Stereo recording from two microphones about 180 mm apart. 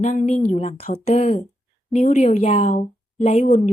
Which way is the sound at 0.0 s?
35° left (ahead or behind).